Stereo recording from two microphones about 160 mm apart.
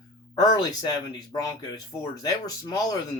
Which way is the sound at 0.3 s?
25° left (ahead or behind).